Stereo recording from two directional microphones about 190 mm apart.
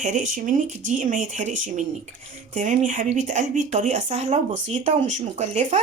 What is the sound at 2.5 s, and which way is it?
Speech, 40° right (ahead or behind).